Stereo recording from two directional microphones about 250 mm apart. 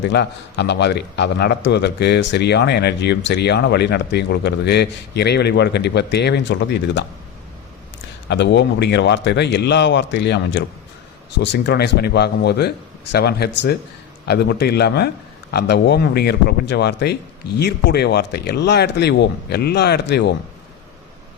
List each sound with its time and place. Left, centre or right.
0.0 s a man's voice: left
8.3 s a man's voice: left